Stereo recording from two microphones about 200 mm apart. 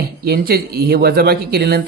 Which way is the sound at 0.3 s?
50° right (ahead or behind).